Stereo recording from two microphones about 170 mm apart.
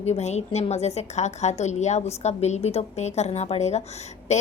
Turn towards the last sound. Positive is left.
turn(degrees=40)  # may be behind; listen again after turning